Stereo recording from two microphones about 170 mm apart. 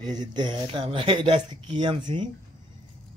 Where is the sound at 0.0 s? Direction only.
25° right (ahead or behind).